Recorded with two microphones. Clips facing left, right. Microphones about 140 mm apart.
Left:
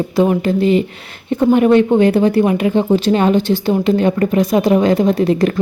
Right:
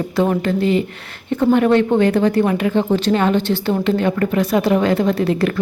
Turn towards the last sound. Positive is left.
turn(degrees=20)  # may be behind; listen again after turning